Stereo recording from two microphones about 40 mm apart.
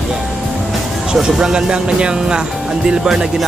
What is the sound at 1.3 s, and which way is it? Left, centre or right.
Speech, centre.